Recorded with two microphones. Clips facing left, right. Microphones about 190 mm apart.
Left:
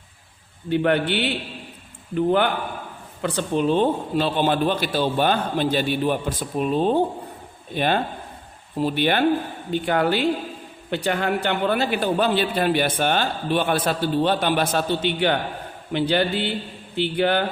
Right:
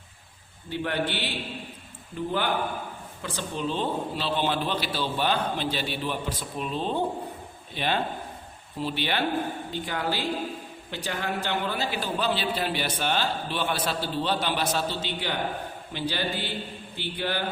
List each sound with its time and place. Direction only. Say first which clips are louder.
0.7 s a man's voice: left 8 dB; 60° left (ahead or behind)